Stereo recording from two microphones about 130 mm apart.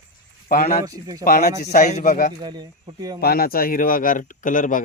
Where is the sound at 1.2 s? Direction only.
70° left (ahead or behind); by 2.3 s 90° left.